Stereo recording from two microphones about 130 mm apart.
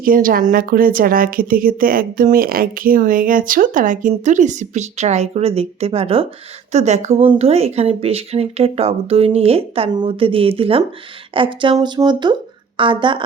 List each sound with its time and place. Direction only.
0.0 s a woman's voice: 90° right
4.2 s speech: 70° right (ahead or behind); by 6.2 s 50° right (ahead or behind)
6.7 s speech: 60° right (ahead or behind); by 13.2 s 40° right (ahead or behind)